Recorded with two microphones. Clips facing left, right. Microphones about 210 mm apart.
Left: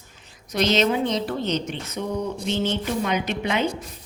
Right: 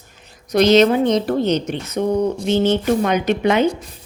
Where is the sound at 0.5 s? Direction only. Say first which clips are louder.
Right 8 dB; 65° right (ahead or behind).